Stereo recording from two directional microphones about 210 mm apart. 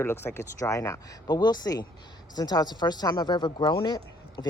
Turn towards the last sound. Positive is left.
turn(degrees=20)  # may be behind; listen again after turning